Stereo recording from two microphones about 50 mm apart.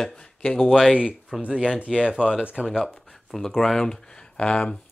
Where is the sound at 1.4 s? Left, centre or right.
Right.